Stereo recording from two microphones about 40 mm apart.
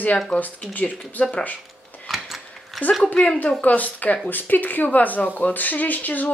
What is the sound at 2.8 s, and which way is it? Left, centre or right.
Speech, centre.